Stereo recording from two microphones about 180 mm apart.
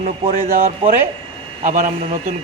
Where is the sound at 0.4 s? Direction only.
50° right (ahead or behind).